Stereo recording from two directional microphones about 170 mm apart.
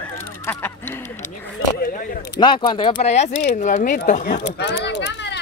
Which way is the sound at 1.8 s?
55° left (ahead or behind).